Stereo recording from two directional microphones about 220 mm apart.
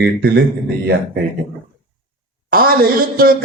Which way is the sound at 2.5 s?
40° right (ahead or behind).